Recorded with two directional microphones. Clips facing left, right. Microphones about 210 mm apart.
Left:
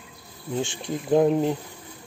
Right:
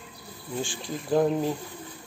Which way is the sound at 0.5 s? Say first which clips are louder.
Left 4 dB; 25° left (ahead or behind).